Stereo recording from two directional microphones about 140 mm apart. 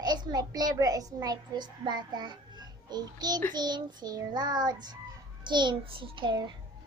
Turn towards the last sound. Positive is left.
turn(degrees=-35)  # may be behind; listen again after turning